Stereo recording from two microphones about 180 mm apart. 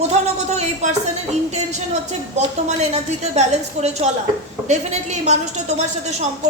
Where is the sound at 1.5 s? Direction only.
40° right (ahead or behind).